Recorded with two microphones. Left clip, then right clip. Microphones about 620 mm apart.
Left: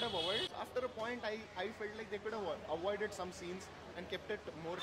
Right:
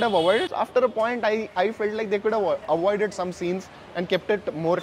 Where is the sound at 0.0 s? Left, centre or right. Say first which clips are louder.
Right 17 dB; right.